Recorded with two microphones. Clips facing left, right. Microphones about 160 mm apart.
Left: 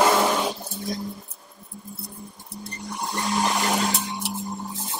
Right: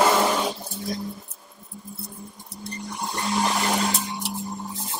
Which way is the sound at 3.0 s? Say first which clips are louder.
Even; centre (ahead or behind).